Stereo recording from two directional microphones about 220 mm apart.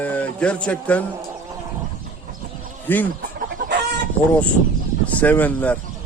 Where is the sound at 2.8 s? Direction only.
10° left (ahead or behind).